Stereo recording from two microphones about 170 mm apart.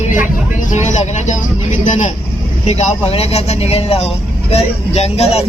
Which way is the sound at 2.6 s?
40° left (ahead or behind).